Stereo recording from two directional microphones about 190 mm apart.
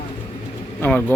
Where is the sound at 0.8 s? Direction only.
10° left (ahead or behind).